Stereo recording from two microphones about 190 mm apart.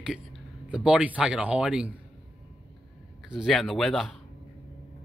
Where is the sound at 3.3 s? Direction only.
Centre (ahead or behind).